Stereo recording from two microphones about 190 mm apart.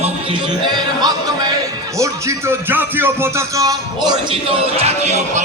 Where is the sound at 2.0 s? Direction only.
15° right (ahead or behind).